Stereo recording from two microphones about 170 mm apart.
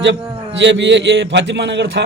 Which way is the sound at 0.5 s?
90° right.